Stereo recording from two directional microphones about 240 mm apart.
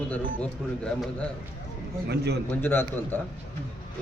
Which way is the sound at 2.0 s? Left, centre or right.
Right.